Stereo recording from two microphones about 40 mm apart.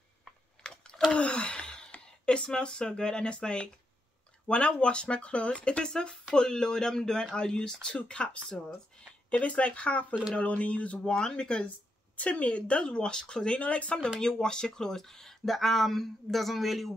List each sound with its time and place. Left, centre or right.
0.7 s a sound: centre
1.1 s gasp: left
2.2 s speech: left
11.1 s speech: centre
12.2 s speech: left
13.6 s speech: left
14.2 s speech: centre